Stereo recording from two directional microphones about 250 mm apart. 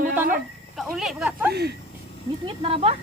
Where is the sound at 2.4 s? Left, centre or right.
Right.